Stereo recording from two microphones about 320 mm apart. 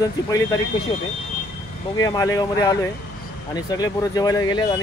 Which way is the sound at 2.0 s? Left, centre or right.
Centre.